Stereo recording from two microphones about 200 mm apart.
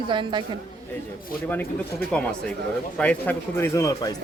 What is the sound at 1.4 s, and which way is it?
Speech, 10° left (ahead or behind).